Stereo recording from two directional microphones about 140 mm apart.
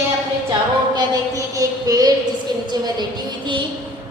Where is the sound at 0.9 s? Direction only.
25° right (ahead or behind).